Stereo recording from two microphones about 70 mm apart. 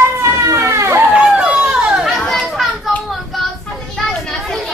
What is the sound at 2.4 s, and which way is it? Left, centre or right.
Children playing, centre.